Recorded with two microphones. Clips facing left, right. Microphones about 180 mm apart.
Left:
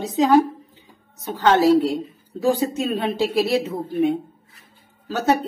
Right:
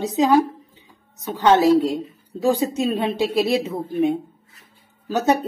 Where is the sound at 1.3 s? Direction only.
20° right (ahead or behind).